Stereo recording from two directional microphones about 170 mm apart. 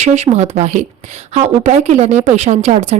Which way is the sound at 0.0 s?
40° right (ahead or behind).